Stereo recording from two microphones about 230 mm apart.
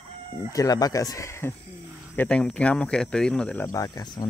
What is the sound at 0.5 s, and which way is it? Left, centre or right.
Speech, centre.